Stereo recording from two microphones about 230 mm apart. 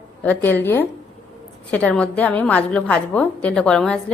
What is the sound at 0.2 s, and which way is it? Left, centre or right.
A woman's voice, centre.